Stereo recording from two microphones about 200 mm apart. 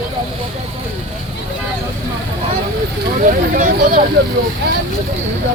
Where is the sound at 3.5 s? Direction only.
45° right (ahead or behind).